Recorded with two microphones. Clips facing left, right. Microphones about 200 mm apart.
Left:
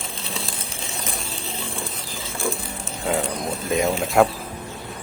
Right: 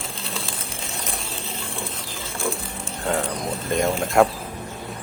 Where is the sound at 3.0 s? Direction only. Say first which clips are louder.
Left 1 dB; centre (ahead or behind).